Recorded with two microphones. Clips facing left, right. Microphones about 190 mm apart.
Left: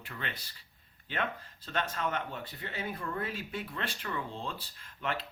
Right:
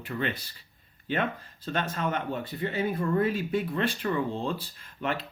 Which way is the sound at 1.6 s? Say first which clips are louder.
Right 4 dB; 50° right (ahead or behind).